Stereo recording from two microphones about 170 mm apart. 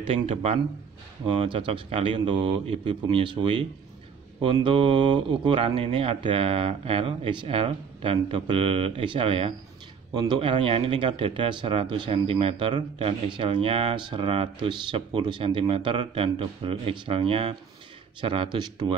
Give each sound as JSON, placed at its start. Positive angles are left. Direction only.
{"t": 0.0, "sound": "speech", "side_deg": -35}